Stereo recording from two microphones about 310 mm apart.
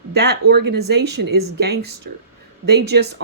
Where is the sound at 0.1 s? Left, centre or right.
Right.